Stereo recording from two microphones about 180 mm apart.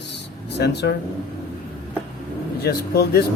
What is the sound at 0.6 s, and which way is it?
Mantra, 65° left (ahead or behind).